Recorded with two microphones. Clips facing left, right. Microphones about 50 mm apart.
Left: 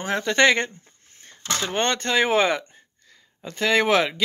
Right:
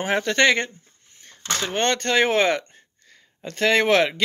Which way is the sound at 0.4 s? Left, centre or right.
Centre.